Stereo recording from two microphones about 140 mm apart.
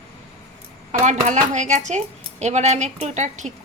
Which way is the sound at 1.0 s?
60° right (ahead or behind).